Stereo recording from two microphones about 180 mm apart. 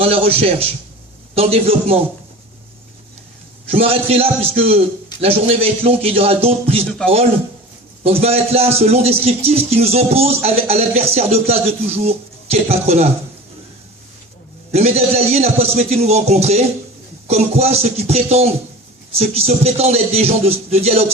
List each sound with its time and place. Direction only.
0.0 s a man's voice: 30° right (ahead or behind)
3.7 s a man's voice: 30° right (ahead or behind)
8.0 s a man's voice: 35° right (ahead or behind)
14.7 s a man's voice: 35° right (ahead or behind)